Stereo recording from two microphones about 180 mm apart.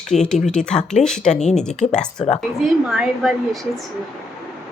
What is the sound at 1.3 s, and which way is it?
Speech, 40° left (ahead or behind).